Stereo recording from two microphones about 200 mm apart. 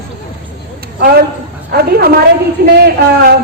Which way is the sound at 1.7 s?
50° right (ahead or behind).